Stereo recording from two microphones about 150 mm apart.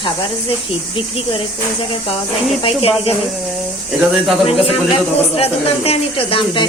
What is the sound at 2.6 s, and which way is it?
Speech, 40° left (ahead or behind).